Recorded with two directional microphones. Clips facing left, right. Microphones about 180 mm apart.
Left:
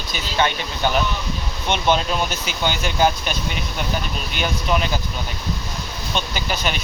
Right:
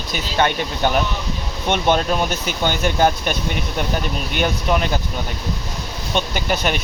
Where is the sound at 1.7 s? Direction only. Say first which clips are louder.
Right 2 dB; 55° right (ahead or behind).